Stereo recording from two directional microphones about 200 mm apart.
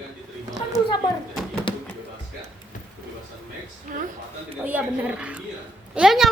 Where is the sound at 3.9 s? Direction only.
45° right (ahead or behind).